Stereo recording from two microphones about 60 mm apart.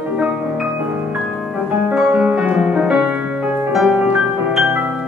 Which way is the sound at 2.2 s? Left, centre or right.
Right.